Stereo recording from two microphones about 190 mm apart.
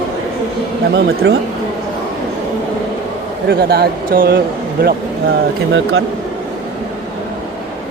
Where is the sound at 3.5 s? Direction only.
55° right (ahead or behind).